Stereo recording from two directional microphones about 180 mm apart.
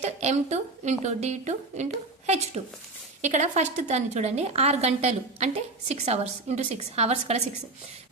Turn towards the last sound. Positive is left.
turn(degrees=-35)  # may be behind; listen again after turning